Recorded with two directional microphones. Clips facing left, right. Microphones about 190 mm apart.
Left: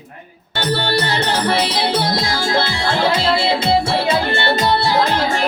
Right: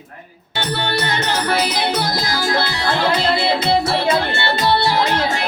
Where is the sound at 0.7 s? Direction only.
35° left (ahead or behind).